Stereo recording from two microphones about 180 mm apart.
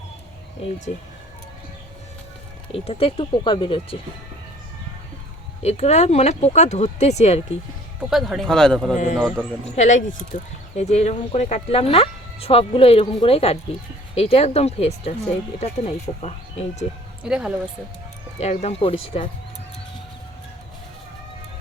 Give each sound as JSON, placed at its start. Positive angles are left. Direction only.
{"t": 2.7, "sound": "speech", "side_deg": 35}
{"t": 5.6, "sound": "speech", "side_deg": 35}
{"t": 8.1, "sound": "a man's voice", "side_deg": 0}
{"t": 9.7, "sound": "speech", "side_deg": 40}
{"t": 17.2, "sound": "a man's voice", "side_deg": -5}
{"t": 18.3, "sound": "speech", "side_deg": 35}